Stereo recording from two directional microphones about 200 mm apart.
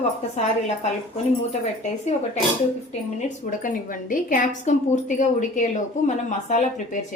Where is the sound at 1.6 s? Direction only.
35° left (ahead or behind).